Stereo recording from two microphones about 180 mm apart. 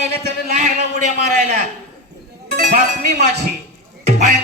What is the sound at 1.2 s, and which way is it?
A man's voice, 40° right (ahead or behind).